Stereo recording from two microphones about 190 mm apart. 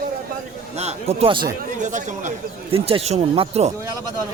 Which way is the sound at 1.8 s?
40° right (ahead or behind).